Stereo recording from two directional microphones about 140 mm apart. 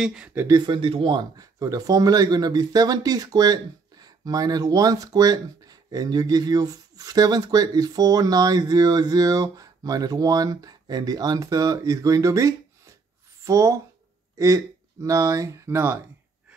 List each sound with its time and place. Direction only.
0.0 s speech: 5° right (ahead or behind)
0.6 s speech: 35° right (ahead or behind); by 16.0 s 20° right (ahead or behind)